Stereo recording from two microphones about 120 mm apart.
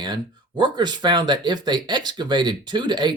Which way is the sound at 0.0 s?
40° right (ahead or behind).